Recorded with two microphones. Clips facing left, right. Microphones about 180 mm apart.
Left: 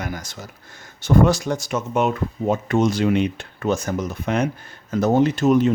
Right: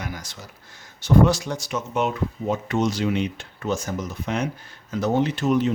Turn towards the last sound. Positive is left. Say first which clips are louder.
# left 5 dB
turn(degrees=45)  # may be behind; listen again after turning